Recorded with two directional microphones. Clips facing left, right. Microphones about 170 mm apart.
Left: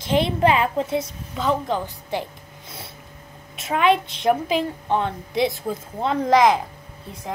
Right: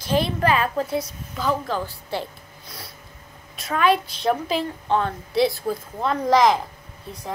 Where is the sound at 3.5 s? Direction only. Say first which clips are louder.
Left 1 dB; 20° left (ahead or behind).